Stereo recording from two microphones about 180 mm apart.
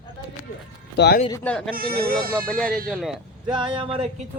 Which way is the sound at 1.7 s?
55° right (ahead or behind).